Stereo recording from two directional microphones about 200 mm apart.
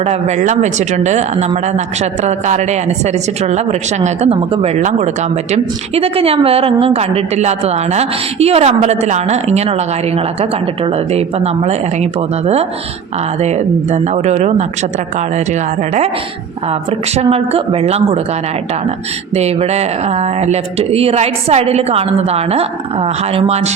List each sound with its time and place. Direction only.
0.0 s a woman's voice: 35° right (ahead or behind)
3.4 s a woman's voice: 35° right (ahead or behind)
11.1 s a woman's voice: 30° right (ahead or behind)
13.9 s a woman's voice: 35° right (ahead or behind)
17.2 s a woman's voice: 30° right (ahead or behind)
20.4 s a woman's voice: 30° right (ahead or behind)